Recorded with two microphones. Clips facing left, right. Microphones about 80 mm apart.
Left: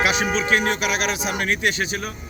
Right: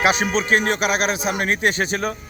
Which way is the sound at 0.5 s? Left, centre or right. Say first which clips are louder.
Right 4 dB; right.